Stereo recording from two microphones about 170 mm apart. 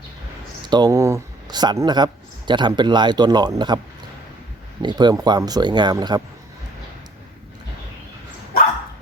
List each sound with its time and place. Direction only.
0.6 s speech: 25° right (ahead or behind)
4.8 s speech: 25° right (ahead or behind)